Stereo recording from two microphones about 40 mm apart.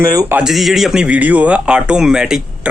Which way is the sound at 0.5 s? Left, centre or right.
Centre.